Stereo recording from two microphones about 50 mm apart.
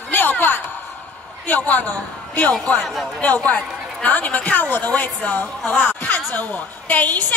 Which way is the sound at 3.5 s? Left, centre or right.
Left.